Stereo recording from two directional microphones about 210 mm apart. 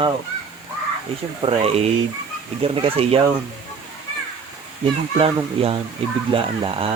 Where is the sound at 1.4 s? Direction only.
25° right (ahead or behind).